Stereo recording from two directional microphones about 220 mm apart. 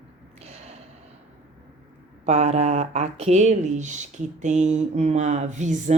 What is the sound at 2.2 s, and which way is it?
Speech, 30° right (ahead or behind).